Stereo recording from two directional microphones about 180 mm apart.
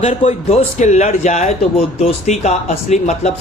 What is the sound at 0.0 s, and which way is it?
Speech, 35° left (ahead or behind).